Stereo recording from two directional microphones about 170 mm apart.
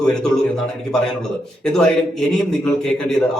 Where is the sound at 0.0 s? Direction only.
5° left (ahead or behind).